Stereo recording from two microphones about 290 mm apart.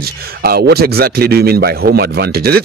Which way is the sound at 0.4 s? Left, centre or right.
Right.